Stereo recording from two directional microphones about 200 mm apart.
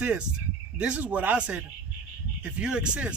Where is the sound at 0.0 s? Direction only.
5° right (ahead or behind).